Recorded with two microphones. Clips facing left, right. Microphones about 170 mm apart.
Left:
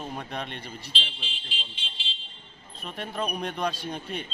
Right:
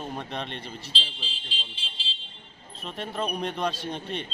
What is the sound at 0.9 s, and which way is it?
Speech, 35° right (ahead or behind).